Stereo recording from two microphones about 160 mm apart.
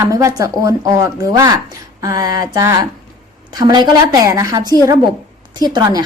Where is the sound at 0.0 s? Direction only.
20° right (ahead or behind).